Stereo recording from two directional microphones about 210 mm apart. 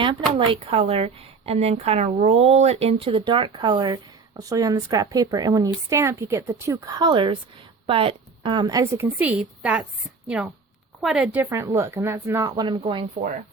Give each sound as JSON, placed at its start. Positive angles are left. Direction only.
{"t": 0.3, "sound": "a woman's voice", "side_deg": -25}